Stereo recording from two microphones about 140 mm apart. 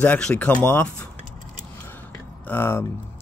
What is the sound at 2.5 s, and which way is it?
Speech, 15° left (ahead or behind).